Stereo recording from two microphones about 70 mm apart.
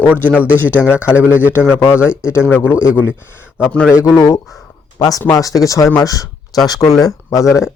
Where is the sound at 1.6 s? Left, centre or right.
Left.